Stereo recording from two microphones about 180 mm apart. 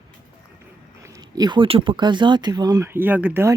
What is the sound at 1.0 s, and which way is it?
Speech, 20° right (ahead or behind).